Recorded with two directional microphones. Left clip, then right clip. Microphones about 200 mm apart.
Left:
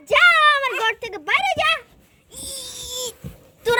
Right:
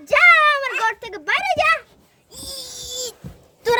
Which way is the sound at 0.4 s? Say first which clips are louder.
Left 1 dB; centre (ahead or behind).